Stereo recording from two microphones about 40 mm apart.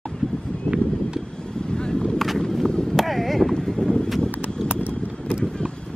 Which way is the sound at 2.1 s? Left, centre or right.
Centre.